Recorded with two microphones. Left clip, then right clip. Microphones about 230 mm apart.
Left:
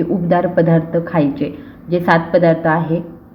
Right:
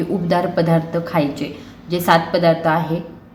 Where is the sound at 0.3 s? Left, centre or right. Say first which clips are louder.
Left 3 dB; centre.